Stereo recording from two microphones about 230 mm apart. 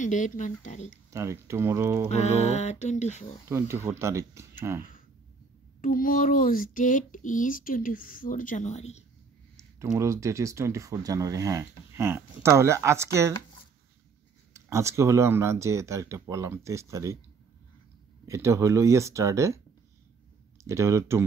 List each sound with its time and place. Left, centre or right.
0.0 s speech: left
1.1 s speech: centre
2.0 s speech: left
3.4 s speech: centre
5.8 s speech: left
9.8 s speech: centre
14.5 s speech: centre
18.2 s speech: centre
20.6 s speech: centre